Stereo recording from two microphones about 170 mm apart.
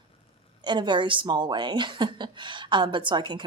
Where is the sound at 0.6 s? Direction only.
25° right (ahead or behind).